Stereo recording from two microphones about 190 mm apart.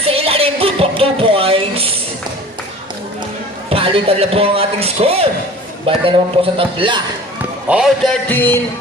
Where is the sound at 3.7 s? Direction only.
30° right (ahead or behind).